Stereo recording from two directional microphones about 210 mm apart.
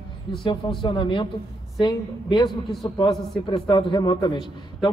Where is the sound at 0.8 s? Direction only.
25° left (ahead or behind).